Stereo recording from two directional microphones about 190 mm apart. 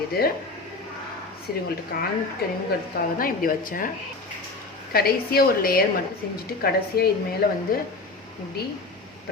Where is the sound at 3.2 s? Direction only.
50° left (ahead or behind).